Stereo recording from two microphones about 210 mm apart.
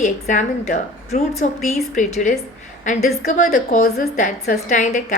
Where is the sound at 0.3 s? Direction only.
35° left (ahead or behind).